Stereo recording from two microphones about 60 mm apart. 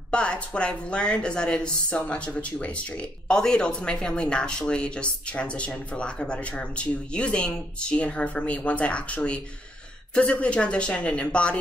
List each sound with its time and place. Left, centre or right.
0.1 s a woman's voice: centre